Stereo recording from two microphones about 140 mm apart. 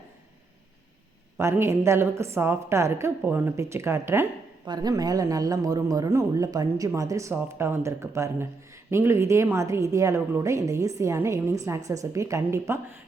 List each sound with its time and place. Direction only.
1.4 s a woman's voice: 20° right (ahead or behind)
4.6 s a woman's voice: 30° right (ahead or behind)